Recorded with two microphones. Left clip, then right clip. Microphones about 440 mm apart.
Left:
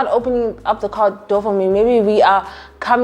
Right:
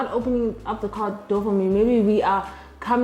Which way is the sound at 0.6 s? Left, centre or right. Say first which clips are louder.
Left 11 dB; left.